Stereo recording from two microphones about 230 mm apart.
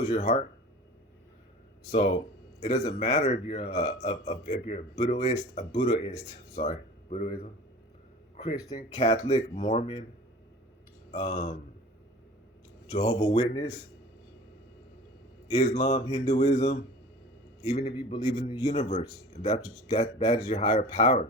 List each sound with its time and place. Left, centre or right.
0.0 s a man's voice: left
1.9 s a man's voice: left
8.8 s a man's voice: left
11.1 s a man's voice: left
12.9 s a man's voice: left
15.4 s a man's voice: left